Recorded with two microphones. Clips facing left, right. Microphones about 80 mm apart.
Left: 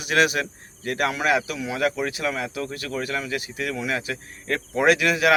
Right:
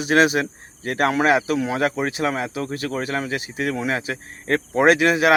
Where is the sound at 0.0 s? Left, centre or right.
Right.